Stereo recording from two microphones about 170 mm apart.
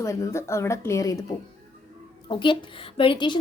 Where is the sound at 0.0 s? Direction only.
20° left (ahead or behind).